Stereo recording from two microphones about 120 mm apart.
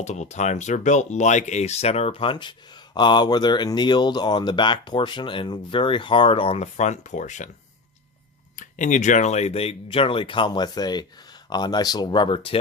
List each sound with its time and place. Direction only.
0.0 s speech: 75° left (ahead or behind)
8.5 s speech: 90° left; by 12.5 s 50° left (ahead or behind)